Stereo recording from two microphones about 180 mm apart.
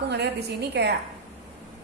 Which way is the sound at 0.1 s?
70° right (ahead or behind).